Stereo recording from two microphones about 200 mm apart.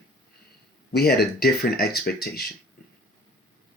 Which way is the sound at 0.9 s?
50° left (ahead or behind).